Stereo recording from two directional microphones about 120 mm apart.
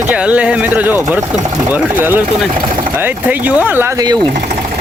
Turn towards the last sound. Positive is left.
turn(degrees=-15)  # may be behind; listen again after turning